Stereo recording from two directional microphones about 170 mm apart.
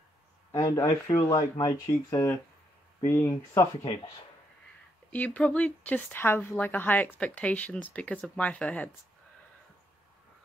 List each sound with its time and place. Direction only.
0.5 s speech: 20° left (ahead or behind)
5.1 s speech: 10° left (ahead or behind)